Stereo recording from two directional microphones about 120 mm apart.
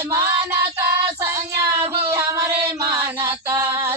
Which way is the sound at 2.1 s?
25° right (ahead or behind).